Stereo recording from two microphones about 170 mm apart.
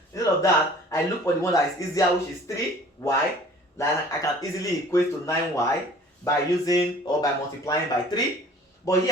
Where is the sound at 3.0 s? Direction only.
15° left (ahead or behind).